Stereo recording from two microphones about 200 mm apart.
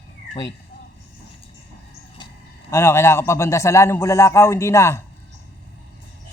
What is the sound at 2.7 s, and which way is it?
A man's voice, 10° left (ahead or behind).